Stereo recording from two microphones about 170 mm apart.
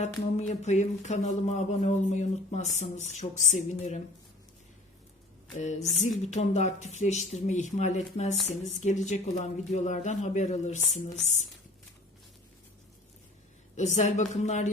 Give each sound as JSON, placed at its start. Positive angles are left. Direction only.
{"t": 0.0, "sound": "speech", "side_deg": 40}
{"t": 6.3, "sound": "speech", "side_deg": 40}
{"t": 13.7, "sound": "speech", "side_deg": 45}